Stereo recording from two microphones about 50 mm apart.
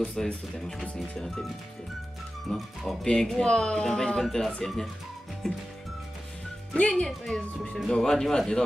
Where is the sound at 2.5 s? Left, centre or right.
Centre.